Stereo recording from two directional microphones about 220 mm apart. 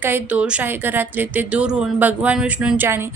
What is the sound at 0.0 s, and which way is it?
Speech, 10° right (ahead or behind).